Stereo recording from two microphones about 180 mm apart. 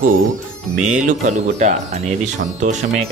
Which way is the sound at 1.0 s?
40° right (ahead or behind).